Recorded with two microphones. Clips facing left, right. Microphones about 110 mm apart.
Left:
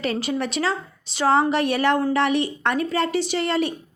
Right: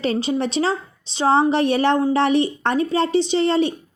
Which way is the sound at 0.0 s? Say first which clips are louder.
Right 4 dB; 25° right (ahead or behind).